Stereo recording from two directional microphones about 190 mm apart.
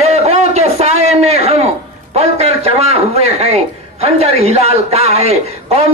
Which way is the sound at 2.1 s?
35° right (ahead or behind).